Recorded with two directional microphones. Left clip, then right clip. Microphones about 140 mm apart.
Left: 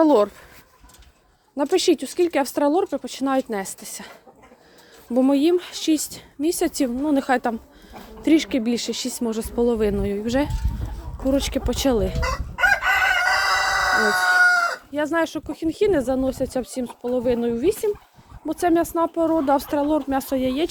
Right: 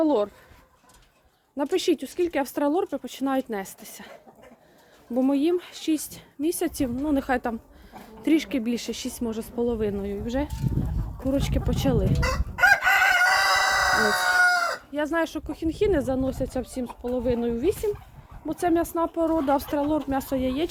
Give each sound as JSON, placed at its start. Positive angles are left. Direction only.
{"t": 0.0, "sound": "speech", "side_deg": 40}
{"t": 1.5, "sound": "speech", "side_deg": 25}
{"t": 5.1, "sound": "speech", "side_deg": 35}
{"t": 11.3, "sound": "speech", "side_deg": 25}
{"t": 12.2, "sound": "chicken", "side_deg": -90}
{"t": 13.8, "sound": "fowl", "side_deg": -70}
{"t": 14.3, "sound": "chicken", "side_deg": -25}
{"t": 14.9, "sound": "speech", "side_deg": 25}